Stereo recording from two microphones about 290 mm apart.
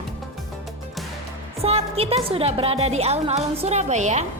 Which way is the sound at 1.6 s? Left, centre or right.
Centre.